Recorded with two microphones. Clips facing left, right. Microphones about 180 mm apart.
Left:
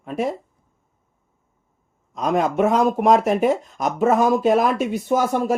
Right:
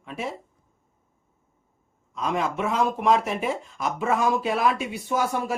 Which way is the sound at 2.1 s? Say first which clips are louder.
Left 7 dB; 45° left (ahead or behind).